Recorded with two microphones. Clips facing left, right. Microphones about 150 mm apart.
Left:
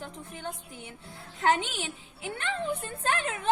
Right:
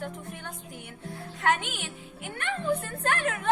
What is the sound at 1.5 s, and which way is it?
A woman's voice, 30° left (ahead or behind).